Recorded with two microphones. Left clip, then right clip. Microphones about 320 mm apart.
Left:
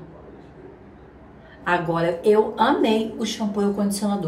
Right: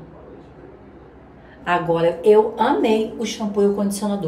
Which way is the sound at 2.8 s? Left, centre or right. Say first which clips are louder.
Right 3 dB; centre.